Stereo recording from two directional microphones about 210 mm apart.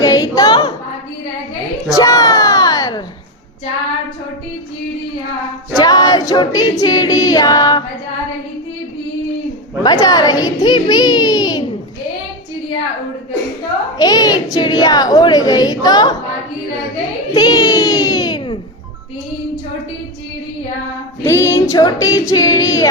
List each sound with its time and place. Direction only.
0.0 s a sound: 15° left (ahead or behind)
2.0 s a sound: 15° left (ahead or behind)
5.7 s choir: 20° left (ahead or behind)
9.8 s choir: 15° left (ahead or behind)
10.6 s a woman's voice: 20° left (ahead or behind)
14.0 s choir: 20° left (ahead or behind)
14.5 s a woman's voice: 20° left (ahead or behind)
17.3 s a child's voice: 20° left (ahead or behind)
21.2 s choir: 15° left (ahead or behind)